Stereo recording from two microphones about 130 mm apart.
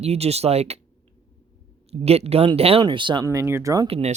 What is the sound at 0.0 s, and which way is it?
Speech, 55° right (ahead or behind).